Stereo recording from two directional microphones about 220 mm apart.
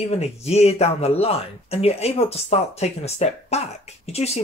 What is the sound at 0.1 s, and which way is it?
Speech, 30° left (ahead or behind).